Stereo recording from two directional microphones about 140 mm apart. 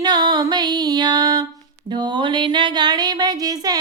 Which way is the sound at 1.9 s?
35° right (ahead or behind).